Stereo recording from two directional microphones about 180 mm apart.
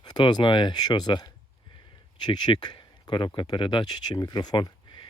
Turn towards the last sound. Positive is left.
turn(degrees=25)  # may be behind; listen again after turning